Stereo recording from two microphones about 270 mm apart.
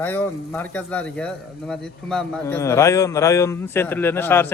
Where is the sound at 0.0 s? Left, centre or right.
Centre.